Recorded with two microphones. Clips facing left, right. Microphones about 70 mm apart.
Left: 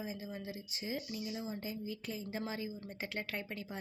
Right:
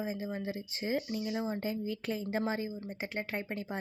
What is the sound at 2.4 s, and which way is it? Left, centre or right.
Speech, right.